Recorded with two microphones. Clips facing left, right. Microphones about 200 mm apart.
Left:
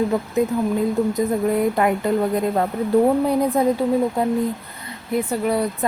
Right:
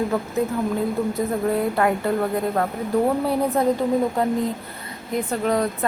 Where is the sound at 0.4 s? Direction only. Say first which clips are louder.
Left 4 dB; 15° left (ahead or behind).